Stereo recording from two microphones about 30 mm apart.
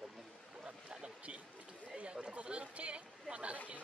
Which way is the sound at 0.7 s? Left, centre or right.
Right.